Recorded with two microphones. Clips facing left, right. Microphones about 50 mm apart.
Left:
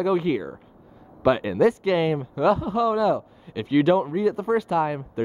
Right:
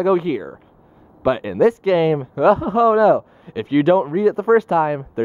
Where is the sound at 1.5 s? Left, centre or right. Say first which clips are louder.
Right 5 dB; right.